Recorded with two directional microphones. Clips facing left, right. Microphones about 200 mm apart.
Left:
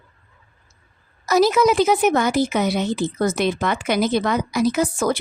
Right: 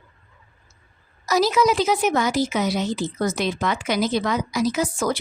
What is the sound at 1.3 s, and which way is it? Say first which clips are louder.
A woman's voice: left 3 dB; 55° left (ahead or behind).